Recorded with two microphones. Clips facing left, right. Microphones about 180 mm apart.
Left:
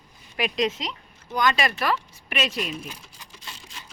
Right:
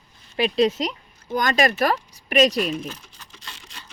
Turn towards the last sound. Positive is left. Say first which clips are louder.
# even
turn(degrees=10)  # may be behind; listen again after turning